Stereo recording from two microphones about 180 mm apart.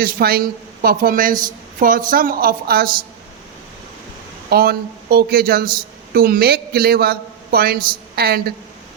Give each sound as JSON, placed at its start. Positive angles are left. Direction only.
{"t": 0.0, "sound": "a woman's voice", "side_deg": -55}
{"t": 4.4, "sound": "a man's voice", "side_deg": -60}